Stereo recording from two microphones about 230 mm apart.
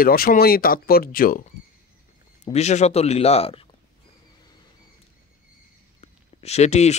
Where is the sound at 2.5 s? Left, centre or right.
Left.